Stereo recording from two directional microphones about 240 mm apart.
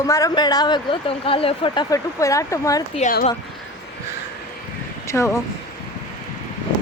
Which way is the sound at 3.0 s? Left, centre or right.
Left.